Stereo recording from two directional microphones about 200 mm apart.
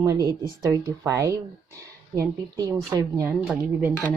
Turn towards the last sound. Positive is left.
turn(degrees=0)  # may be behind; listen again after turning